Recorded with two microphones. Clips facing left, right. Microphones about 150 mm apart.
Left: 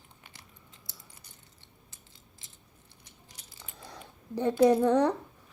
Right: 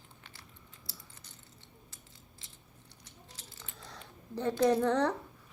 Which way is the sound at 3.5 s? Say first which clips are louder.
Left 4 dB; 10° left (ahead or behind).